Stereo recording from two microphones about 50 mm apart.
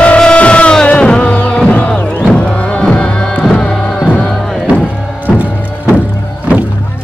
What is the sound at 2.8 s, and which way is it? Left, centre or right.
Music, centre.